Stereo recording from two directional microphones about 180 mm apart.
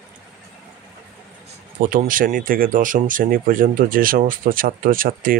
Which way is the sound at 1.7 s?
50° right (ahead or behind).